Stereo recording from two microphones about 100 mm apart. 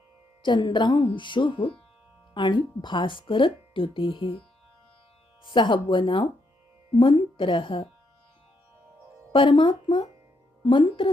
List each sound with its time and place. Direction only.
0.4 s speech: 50° left (ahead or behind)
5.5 s speech: 50° left (ahead or behind)
9.3 s speech: 55° left (ahead or behind)